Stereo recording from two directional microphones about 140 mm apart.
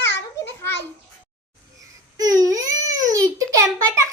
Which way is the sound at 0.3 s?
15° left (ahead or behind).